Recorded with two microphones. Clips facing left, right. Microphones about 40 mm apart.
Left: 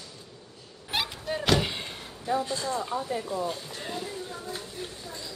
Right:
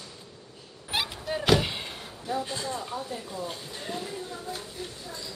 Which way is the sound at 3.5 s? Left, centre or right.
Centre.